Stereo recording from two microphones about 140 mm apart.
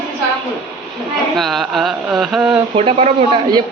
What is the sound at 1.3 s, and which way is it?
A woman's voice, centre (ahead or behind).